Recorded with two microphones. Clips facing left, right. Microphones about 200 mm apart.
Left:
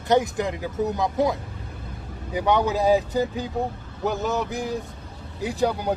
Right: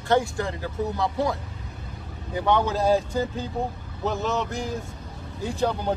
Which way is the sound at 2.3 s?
15° left (ahead or behind).